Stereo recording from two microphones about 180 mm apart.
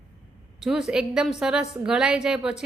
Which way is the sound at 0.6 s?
5° right (ahead or behind).